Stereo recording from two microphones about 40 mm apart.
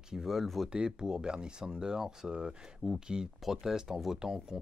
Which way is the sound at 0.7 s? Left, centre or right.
Right.